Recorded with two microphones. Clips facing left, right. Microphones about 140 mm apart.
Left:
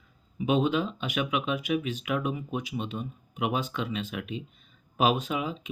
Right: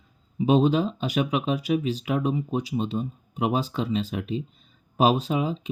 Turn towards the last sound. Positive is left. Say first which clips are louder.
# right 5 dB
turn(degrees=-35)  # may be behind; listen again after turning